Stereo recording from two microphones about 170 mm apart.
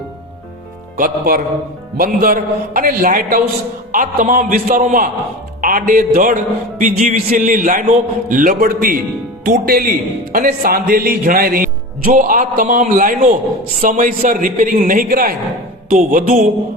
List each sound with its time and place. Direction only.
0.9 s a man's voice: 60° right (ahead or behind)